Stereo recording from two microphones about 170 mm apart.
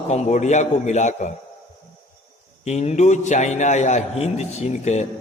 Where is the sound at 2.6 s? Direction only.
40° left (ahead or behind).